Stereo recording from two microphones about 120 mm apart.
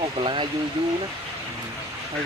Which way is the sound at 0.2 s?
45° right (ahead or behind).